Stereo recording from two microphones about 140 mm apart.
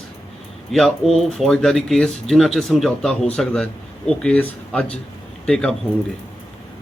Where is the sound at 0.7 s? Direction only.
Centre (ahead or behind).